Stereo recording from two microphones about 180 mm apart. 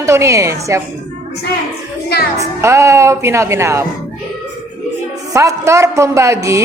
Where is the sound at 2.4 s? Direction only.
15° right (ahead or behind).